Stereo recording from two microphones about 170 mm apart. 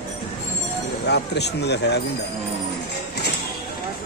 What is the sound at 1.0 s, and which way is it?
Speech, 80° left.